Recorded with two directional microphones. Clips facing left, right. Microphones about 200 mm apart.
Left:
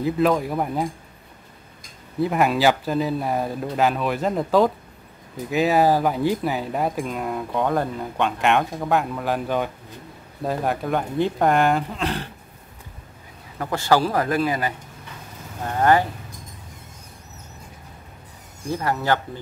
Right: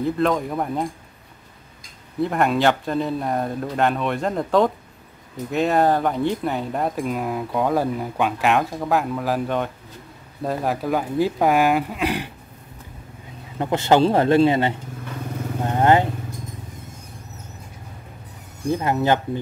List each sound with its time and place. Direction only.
0.0 s speech: 5° left (ahead or behind)
2.1 s speech: 5° left (ahead or behind)
13.6 s a man's voice: 20° right (ahead or behind)
18.7 s a man's voice: 20° right (ahead or behind)